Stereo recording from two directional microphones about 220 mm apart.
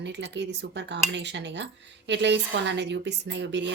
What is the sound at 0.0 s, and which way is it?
A woman's voice, 50° right (ahead or behind).